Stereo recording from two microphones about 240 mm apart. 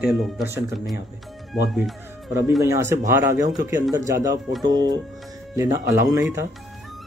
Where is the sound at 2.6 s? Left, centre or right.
Centre.